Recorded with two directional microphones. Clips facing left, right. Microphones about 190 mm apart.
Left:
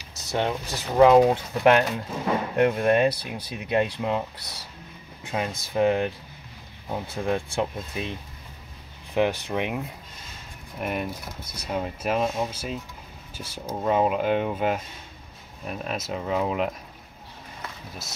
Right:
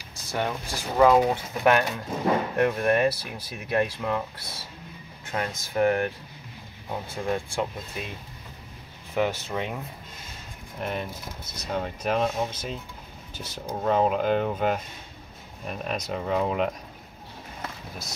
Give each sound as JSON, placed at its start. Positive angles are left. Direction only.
{"t": 0.3, "sound": "speech", "side_deg": 20}
{"t": 9.1, "sound": "speech", "side_deg": 15}
{"t": 10.8, "sound": "speech", "side_deg": 10}